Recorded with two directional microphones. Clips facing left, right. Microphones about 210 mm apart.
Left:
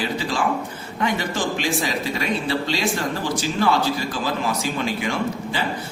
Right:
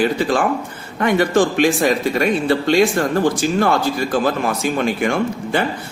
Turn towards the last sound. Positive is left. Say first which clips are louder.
# right 6 dB
turn(degrees=-55)  # may be behind; listen again after turning